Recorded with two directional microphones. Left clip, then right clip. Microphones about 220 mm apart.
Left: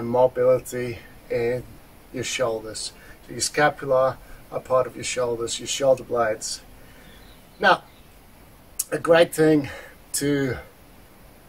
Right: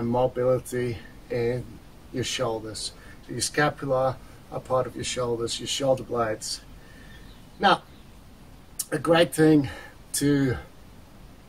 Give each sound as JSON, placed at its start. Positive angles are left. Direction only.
{"t": 0.1, "sound": "speech", "side_deg": 0}
{"t": 8.7, "sound": "speech", "side_deg": 5}